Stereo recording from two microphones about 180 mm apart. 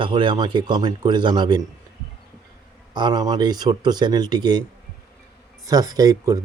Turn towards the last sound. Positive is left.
turn(degrees=-20)  # may be behind; listen again after turning